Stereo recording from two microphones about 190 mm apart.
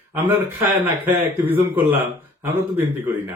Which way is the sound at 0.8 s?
10° right (ahead or behind).